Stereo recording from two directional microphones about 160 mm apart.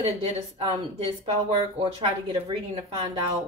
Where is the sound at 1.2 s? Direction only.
35° right (ahead or behind).